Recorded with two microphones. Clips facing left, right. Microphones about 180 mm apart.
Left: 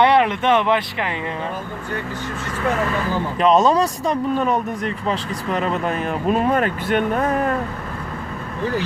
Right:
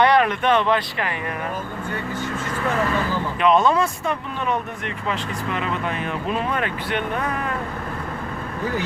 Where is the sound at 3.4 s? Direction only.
40° left (ahead or behind).